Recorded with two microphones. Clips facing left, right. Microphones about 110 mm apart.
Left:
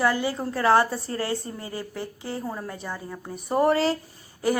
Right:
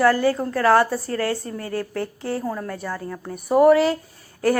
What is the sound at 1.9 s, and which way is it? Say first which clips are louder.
Speech: right 6 dB; 70° right (ahead or behind).